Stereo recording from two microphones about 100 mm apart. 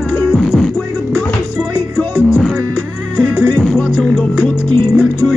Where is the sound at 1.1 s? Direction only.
15° left (ahead or behind).